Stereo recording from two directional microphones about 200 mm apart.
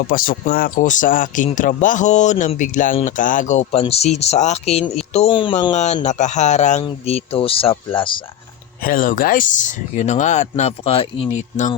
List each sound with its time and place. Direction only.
0.1 s speech: 45° left (ahead or behind); by 5.5 s 25° left (ahead or behind)
5.7 s speech: 35° left (ahead or behind)
8.8 s speech: 45° left (ahead or behind)